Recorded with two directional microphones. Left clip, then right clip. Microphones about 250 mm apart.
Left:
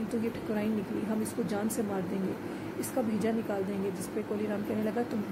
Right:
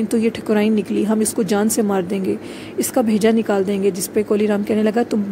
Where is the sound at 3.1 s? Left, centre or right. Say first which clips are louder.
Right 15 dB; right.